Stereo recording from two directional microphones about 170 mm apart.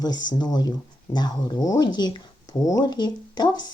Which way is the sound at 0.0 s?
25° left (ahead or behind).